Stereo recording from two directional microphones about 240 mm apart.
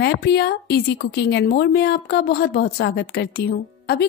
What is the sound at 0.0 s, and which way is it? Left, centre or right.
Speech, left.